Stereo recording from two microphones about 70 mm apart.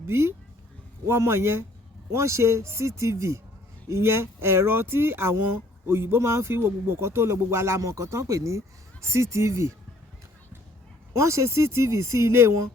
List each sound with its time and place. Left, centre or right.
0.1 s speech: right
11.1 s speech: right